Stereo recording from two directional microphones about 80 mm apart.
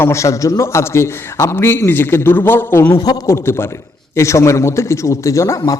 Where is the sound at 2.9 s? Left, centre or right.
Left.